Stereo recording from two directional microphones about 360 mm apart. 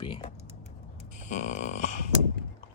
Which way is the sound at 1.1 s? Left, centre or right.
Centre.